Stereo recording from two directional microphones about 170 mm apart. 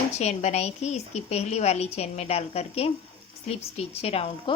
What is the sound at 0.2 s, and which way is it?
A woman's voice, 40° left (ahead or behind).